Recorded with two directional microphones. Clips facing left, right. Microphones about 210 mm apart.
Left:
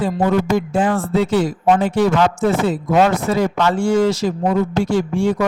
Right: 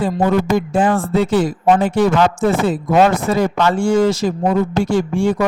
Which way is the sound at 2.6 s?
50° right (ahead or behind).